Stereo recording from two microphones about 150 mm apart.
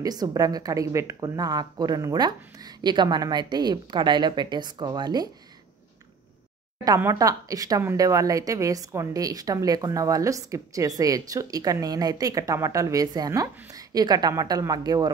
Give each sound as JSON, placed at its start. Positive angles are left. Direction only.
{"t": 0.0, "sound": "a woman's voice", "side_deg": -25}
{"t": 7.0, "sound": "a woman's voice", "side_deg": -20}